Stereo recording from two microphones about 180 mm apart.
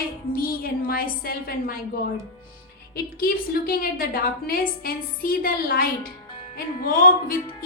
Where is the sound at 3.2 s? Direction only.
55° left (ahead or behind).